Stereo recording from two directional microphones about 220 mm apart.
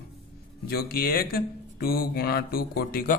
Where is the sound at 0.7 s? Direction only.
45° left (ahead or behind).